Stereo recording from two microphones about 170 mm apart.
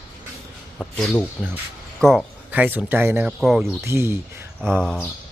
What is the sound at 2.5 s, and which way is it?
Speech, 10° right (ahead or behind).